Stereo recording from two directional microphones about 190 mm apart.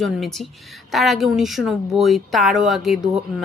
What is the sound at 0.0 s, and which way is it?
A woman's voice, centre (ahead or behind).